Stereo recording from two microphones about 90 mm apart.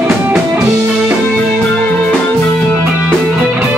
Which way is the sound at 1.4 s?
15° left (ahead or behind).